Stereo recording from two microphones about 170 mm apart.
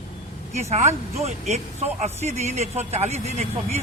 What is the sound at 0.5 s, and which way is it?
Speech, 40° right (ahead or behind).